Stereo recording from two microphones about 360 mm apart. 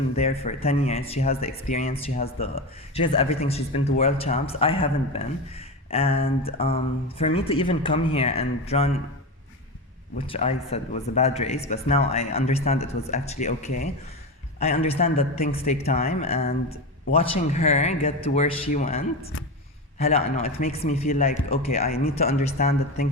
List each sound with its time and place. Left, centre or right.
0.2 s speech: centre
10.2 s a man's voice: centre